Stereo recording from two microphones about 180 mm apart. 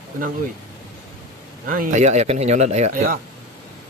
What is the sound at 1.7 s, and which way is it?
Speech, 45° right (ahead or behind).